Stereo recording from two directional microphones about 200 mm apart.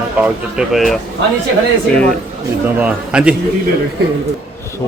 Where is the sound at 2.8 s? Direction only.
5° right (ahead or behind).